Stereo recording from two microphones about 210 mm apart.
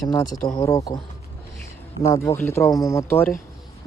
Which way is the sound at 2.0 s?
15° left (ahead or behind).